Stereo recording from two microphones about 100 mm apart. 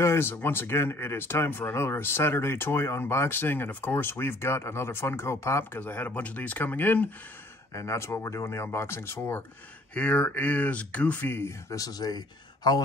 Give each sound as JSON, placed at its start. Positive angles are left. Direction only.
{"t": 0.0, "sound": "speech", "side_deg": 25}
{"t": 7.7, "sound": "speech", "side_deg": 30}
{"t": 9.9, "sound": "speech", "side_deg": 10}
{"t": 11.7, "sound": "a man's voice", "side_deg": 40}